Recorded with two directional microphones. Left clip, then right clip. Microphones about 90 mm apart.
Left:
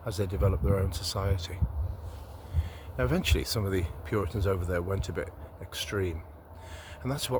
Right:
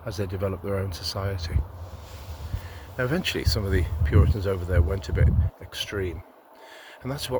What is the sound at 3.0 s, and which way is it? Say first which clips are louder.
Speech: right 3 dB; 10° left (ahead or behind).